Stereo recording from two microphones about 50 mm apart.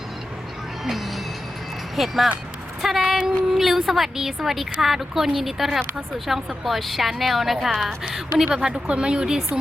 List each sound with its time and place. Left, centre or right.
0.9 s music: centre
2.0 s a woman's voice: centre
8.5 s a woman's voice: centre